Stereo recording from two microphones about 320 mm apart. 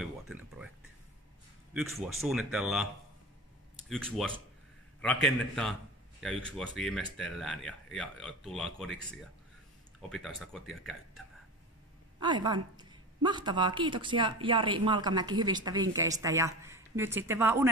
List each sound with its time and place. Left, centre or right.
0.0 s a sound: centre
1.7 s speech: centre
3.9 s speech: centre
9.9 s speech: centre
12.2 s speech: centre